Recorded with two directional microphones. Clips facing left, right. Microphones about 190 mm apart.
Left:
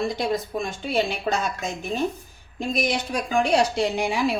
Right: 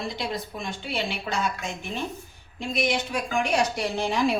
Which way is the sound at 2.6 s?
40° left (ahead or behind).